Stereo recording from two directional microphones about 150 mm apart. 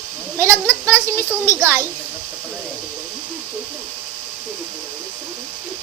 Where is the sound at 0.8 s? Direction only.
20° right (ahead or behind).